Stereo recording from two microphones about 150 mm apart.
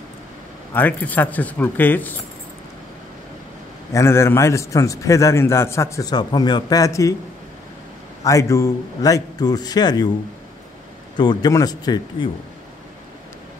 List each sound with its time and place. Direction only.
0.7 s speech: 10° left (ahead or behind)
3.9 s a man's voice: 15° left (ahead or behind)
8.2 s a man's voice: 20° left (ahead or behind)
11.1 s a man's voice: 30° left (ahead or behind)